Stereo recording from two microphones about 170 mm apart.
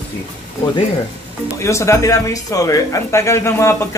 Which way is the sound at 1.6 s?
15° left (ahead or behind).